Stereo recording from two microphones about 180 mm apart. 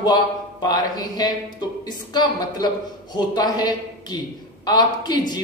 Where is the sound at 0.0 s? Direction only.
20° left (ahead or behind).